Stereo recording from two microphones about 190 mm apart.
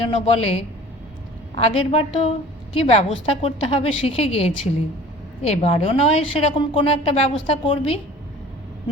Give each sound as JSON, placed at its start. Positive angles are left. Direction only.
{"t": 0.1, "sound": "a woman's voice", "side_deg": 30}